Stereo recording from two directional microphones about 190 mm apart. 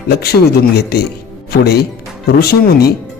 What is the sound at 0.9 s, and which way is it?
Speech, 55° left (ahead or behind).